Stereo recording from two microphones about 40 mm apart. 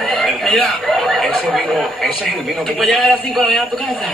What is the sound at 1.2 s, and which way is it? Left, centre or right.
Speech, centre.